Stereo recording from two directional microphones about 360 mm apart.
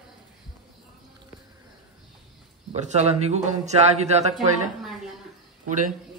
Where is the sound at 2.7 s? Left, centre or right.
Centre.